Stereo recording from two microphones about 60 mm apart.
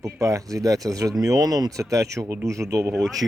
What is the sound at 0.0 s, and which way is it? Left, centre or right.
Speech, right.